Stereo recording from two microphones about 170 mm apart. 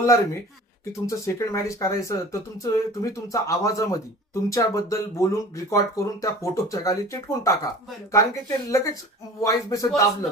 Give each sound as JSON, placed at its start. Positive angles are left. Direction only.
{"t": 0.0, "sound": "speech", "side_deg": 15}